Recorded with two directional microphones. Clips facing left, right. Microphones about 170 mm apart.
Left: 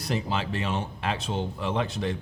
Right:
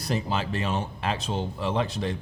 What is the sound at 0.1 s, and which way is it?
Speech, 40° right (ahead or behind).